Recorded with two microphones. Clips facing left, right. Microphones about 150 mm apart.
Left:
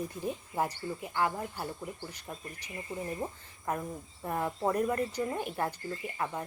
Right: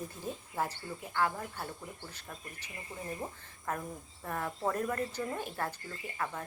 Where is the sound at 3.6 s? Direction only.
15° left (ahead or behind).